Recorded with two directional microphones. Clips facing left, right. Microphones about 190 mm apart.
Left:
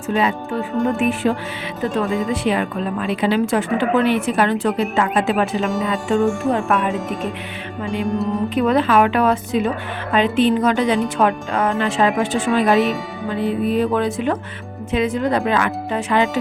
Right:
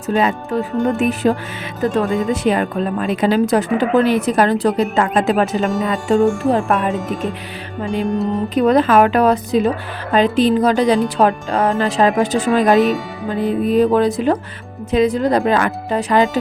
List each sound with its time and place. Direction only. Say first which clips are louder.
0.2 s a woman's voice: right 3 dB; 45° right (ahead or behind)
2.0 s music: right 2 dB; centre (ahead or behind)
2.3 s a woman's voice: right 3 dB; 40° right (ahead or behind)
6.9 s music: right 2 dB; centre (ahead or behind)
8.5 s a woman's voice: right 4 dB; 40° right (ahead or behind)